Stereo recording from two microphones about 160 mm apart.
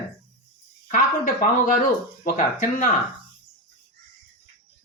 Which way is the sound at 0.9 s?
55° left (ahead or behind).